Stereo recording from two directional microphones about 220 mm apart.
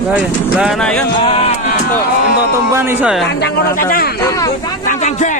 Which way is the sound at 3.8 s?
40° left (ahead or behind).